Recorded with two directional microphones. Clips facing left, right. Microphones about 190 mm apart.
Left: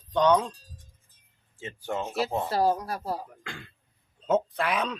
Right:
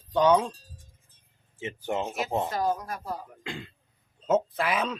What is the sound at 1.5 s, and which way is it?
Speech, 20° right (ahead or behind).